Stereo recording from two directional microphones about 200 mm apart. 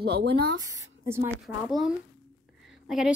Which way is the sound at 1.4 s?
Centre (ahead or behind).